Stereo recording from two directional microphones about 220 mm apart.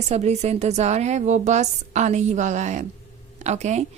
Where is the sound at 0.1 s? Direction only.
30° right (ahead or behind).